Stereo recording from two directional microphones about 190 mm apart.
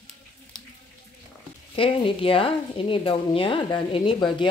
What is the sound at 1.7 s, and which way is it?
Speech, 30° left (ahead or behind).